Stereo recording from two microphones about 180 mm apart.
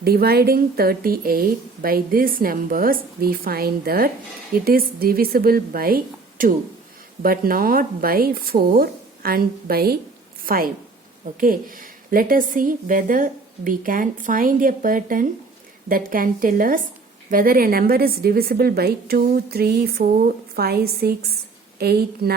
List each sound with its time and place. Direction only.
0.0 s a woman's voice: 60° right (ahead or behind)